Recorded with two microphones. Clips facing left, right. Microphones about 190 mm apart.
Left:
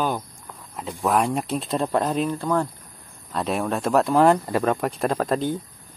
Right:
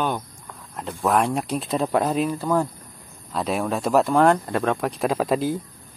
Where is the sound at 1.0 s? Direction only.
Centre (ahead or behind).